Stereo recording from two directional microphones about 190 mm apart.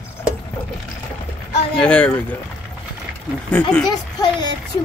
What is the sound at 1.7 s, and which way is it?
Speech, 5° left (ahead or behind).